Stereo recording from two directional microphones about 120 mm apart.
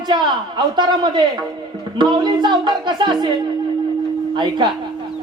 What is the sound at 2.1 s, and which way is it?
A woman's voice, 40° right (ahead or behind).